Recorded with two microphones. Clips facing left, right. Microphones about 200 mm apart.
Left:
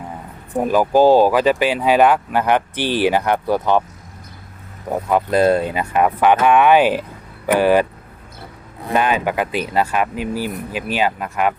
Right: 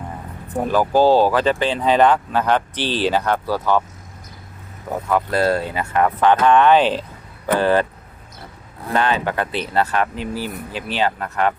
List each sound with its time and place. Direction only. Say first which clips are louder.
0.5 s speech: left 2 dB; 15° left (ahead or behind)
4.9 s speech: left 3 dB; 20° left (ahead or behind)
8.9 s speech: left 2 dB; 15° left (ahead or behind)